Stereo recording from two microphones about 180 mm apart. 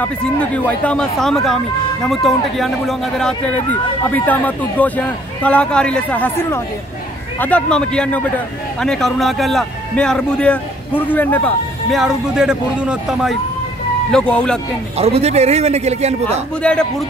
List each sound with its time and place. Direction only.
0.6 s a man's voice: 5° left (ahead or behind)
15.0 s a man's voice: 35° right (ahead or behind)